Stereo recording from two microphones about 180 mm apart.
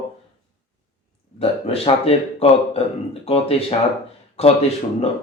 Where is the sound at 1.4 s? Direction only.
35° left (ahead or behind).